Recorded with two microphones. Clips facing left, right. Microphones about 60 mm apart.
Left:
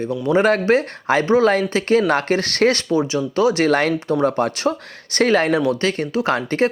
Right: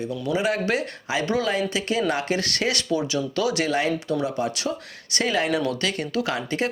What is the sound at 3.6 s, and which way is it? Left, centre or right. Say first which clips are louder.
Speech: left 6 dB; left.